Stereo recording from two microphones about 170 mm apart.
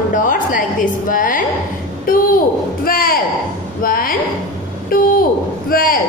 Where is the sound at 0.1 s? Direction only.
50° left (ahead or behind).